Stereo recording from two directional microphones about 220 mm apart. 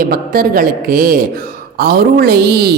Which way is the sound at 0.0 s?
40° right (ahead or behind).